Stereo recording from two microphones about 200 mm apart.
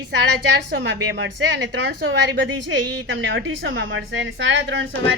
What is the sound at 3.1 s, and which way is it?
A woman's voice, 65° right (ahead or behind).